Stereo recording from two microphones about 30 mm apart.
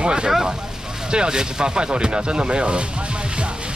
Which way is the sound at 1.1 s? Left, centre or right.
Right.